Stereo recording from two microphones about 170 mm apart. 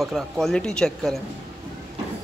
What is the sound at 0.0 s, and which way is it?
Speech, centre (ahead or behind).